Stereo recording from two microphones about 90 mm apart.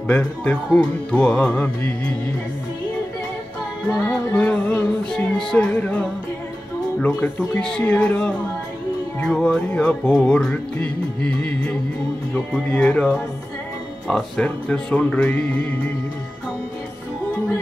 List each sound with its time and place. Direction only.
0.0 s music: 15° left (ahead or behind)
3.9 s music: 15° left (ahead or behind)
7.0 s speech: 20° left (ahead or behind)
7.8 s music: 20° left (ahead or behind)
12.7 s music: 15° left (ahead or behind)